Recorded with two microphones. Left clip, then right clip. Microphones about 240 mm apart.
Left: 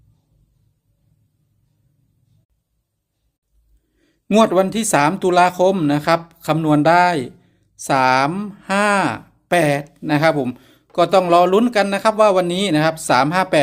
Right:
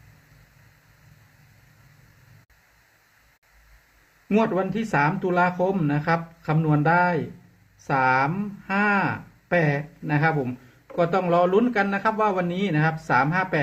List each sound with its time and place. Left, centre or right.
4.3 s speech: left